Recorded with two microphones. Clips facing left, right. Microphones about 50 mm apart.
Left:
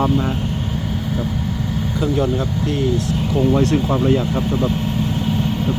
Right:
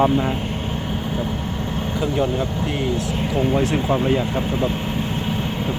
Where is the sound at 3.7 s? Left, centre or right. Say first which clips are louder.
Left 2 dB; centre.